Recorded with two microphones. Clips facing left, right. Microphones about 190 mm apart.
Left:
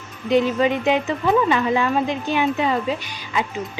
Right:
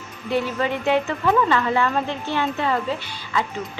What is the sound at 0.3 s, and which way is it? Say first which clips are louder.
A woman's voice: left 5 dB; 15° left (ahead or behind).